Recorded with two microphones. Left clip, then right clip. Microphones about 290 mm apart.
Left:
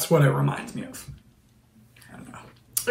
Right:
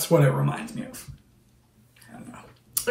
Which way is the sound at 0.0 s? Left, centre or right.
Centre.